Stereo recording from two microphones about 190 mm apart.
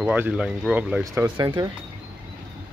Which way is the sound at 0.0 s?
10° right (ahead or behind).